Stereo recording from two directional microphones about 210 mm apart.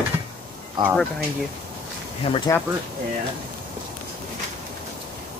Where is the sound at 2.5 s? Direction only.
15° left (ahead or behind).